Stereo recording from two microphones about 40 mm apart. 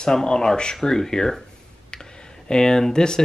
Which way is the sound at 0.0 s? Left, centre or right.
Centre.